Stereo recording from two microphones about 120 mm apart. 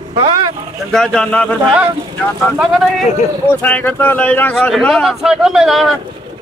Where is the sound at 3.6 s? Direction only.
15° left (ahead or behind).